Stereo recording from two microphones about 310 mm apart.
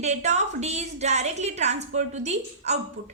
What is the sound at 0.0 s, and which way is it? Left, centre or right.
A woman's voice, right.